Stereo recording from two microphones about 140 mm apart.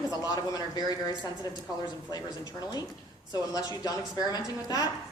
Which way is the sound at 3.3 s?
25° left (ahead or behind).